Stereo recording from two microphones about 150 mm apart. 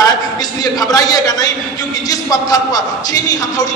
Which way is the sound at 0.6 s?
25° left (ahead or behind).